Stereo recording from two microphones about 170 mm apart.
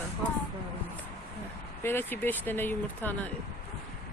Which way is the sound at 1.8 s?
10° left (ahead or behind).